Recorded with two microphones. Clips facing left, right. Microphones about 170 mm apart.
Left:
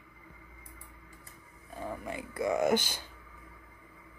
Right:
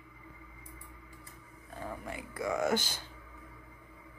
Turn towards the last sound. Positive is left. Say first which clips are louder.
# left 3 dB
turn(degrees=20)  # may be behind; listen again after turning